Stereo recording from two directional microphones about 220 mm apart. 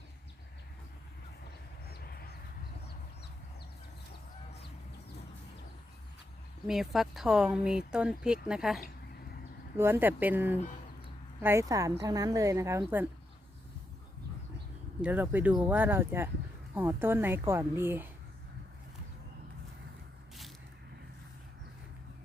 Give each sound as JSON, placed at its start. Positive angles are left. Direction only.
{"t": 1.9, "sound": "a sound", "side_deg": 45}
{"t": 6.7, "sound": "a woman's voice", "side_deg": 0}
{"t": 15.0, "sound": "a woman's voice", "side_deg": -10}